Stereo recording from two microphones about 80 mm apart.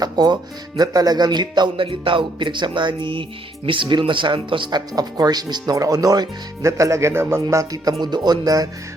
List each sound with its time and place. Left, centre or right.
0.0 s music: right
0.8 s speech: right
4.9 s speech: right
7.5 s speech: right
8.0 s speech: right